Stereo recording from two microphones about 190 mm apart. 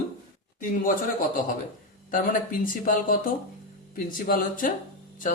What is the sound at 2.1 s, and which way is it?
Speech, 45° left (ahead or behind).